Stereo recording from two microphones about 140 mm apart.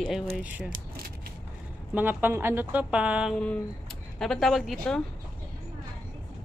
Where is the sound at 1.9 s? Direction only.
10° right (ahead or behind); by 5.0 s 5° left (ahead or behind).